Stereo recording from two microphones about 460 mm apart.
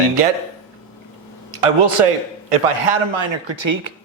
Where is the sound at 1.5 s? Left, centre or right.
Right.